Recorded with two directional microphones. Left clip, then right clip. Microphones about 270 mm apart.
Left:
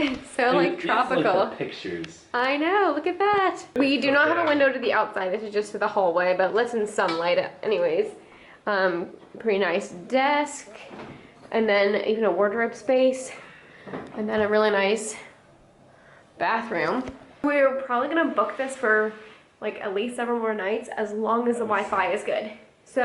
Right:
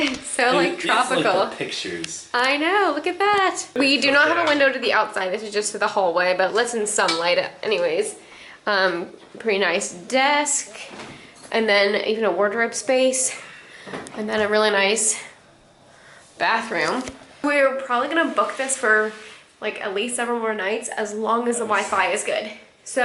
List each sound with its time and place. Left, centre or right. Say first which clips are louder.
0.1 s speech: right 3 dB; centre
16.4 s speech: right 4 dB; centre